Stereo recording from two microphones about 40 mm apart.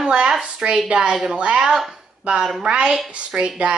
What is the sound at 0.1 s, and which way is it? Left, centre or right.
A woman's voice, right.